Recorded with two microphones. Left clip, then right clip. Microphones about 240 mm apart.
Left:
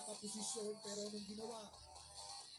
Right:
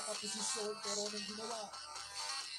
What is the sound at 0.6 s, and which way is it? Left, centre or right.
Speech, right.